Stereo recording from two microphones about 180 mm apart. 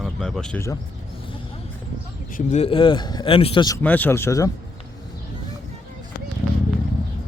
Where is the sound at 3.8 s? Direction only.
10° left (ahead or behind).